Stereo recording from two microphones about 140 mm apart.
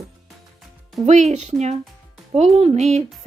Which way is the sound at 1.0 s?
55° right (ahead or behind).